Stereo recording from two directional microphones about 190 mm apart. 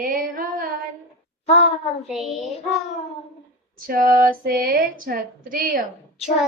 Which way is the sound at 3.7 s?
50° right (ahead or behind).